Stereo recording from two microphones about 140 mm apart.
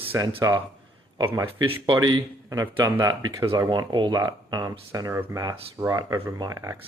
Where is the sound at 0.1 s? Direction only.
25° right (ahead or behind).